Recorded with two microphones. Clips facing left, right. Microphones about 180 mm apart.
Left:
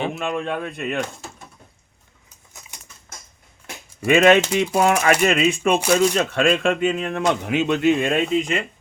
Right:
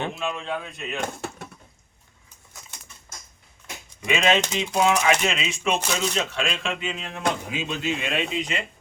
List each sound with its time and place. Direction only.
0.2 s speech: 55° left (ahead or behind)
1.0 s bird: 60° right (ahead or behind)
4.0 s speech: 50° left (ahead or behind)
4.4 s a sound: 10° left (ahead or behind)
4.8 s speech: 50° left (ahead or behind)
7.4 s speech: 65° left (ahead or behind); by 8.6 s 50° left (ahead or behind)